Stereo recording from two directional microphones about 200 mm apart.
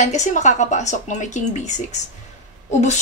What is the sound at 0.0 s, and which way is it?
A woman's voice, 35° left (ahead or behind).